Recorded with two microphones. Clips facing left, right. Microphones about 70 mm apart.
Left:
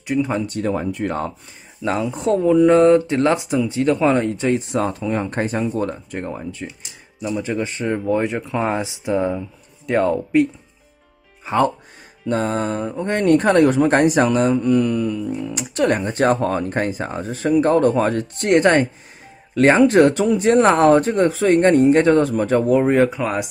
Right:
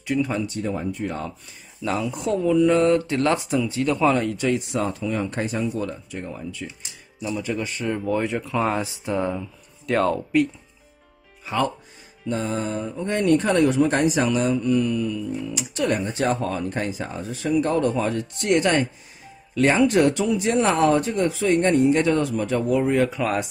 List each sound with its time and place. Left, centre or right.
0.0 s speech: left
0.5 s speech: left
1.8 s speech: left
3.1 s speech: left
7.3 s speech: left
11.4 s speech: left
12.3 s speech: left
23.2 s speech: centre